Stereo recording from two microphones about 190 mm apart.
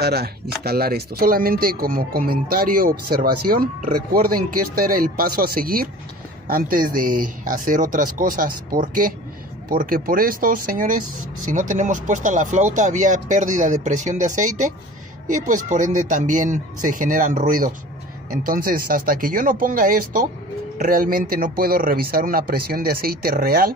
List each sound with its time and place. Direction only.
0.0 s speech: 55° right (ahead or behind)